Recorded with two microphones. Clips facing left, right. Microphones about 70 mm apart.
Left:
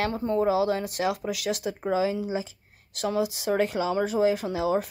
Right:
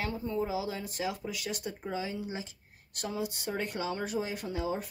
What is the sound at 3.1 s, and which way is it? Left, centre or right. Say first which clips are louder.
Speech: left 9 dB; left.